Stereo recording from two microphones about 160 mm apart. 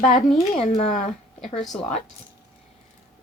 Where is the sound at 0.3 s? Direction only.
Centre (ahead or behind).